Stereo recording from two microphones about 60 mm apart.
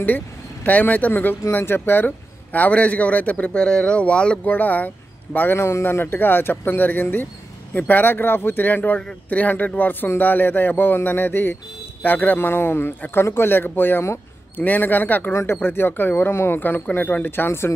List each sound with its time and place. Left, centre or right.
0.7 s a man's voice: left
4.5 s a man's voice: left